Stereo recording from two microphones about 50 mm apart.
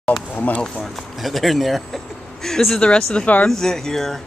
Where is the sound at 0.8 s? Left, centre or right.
Centre.